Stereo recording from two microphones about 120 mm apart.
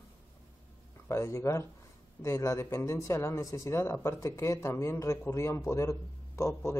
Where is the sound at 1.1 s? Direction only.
25° left (ahead or behind).